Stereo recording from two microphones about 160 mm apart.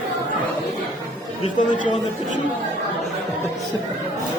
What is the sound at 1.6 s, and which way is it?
Speech, 55° left (ahead or behind).